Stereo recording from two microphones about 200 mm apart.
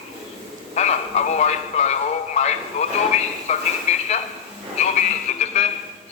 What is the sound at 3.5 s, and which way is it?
Speech, 35° left (ahead or behind).